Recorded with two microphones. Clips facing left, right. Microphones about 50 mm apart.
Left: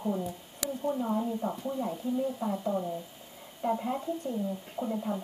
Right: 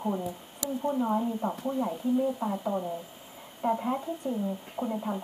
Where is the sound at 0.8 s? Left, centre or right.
Right.